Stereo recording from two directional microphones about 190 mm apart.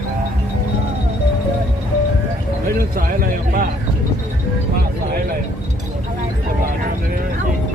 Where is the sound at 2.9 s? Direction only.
50° right (ahead or behind).